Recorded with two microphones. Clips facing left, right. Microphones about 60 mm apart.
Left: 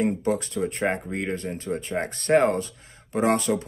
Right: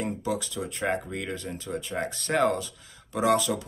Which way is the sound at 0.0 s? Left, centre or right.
Left.